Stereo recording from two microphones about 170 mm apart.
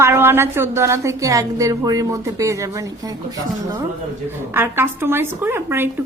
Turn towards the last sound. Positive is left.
turn(degrees=-15)  # may be behind; listen again after turning